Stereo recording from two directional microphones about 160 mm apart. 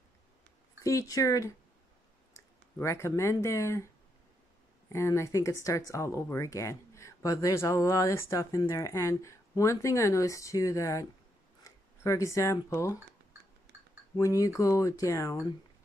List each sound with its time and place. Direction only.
0.8 s speech: 20° left (ahead or behind)
2.8 s speech: 15° left (ahead or behind)
4.9 s speech: 15° left (ahead or behind)
11.6 s a sound: 20° left (ahead or behind)
12.6 s speech: 20° left (ahead or behind)
14.2 s speech: 20° left (ahead or behind)